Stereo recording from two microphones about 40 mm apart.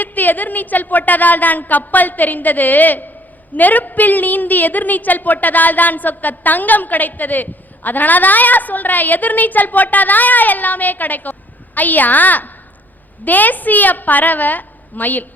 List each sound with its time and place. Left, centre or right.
0.0 s a woman's voice: left